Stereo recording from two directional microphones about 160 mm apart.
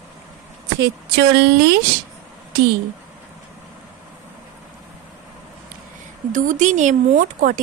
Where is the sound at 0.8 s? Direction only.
90° right.